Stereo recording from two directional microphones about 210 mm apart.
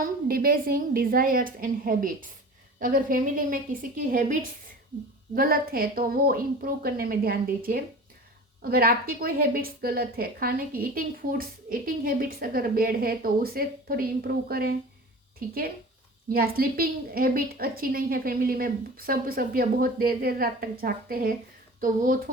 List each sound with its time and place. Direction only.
0.0 s a woman's voice: 45° right (ahead or behind)
16.3 s a woman's voice: 45° right (ahead or behind)